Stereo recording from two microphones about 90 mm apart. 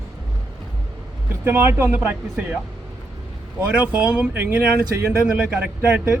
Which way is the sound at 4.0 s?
15° right (ahead or behind).